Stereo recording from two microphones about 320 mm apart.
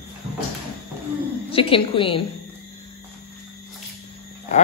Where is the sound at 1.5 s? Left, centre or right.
Centre.